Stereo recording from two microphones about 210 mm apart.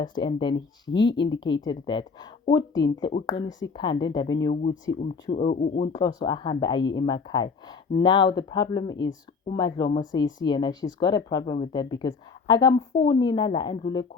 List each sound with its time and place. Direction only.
0.0 s speech: 20° left (ahead or behind)
5.3 s speech: 30° left (ahead or behind)
5.9 s speech: 20° left (ahead or behind)